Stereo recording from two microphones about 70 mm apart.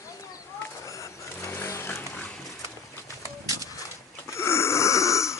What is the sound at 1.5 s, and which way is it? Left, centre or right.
Dog, left.